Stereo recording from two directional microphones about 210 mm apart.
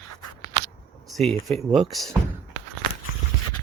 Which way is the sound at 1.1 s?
Centre (ahead or behind).